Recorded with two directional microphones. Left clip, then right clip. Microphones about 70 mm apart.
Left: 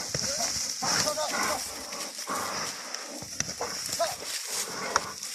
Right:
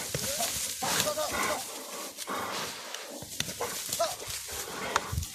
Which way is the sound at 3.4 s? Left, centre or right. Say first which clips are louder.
Left 1 dB; centre.